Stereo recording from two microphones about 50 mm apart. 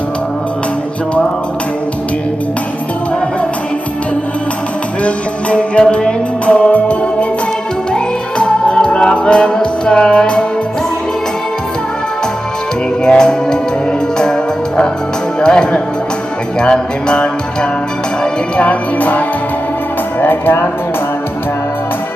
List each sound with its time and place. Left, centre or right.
5.0 s music: left
13.0 s music: centre
15.4 s music: centre
18.6 s music: left
20.2 s music: left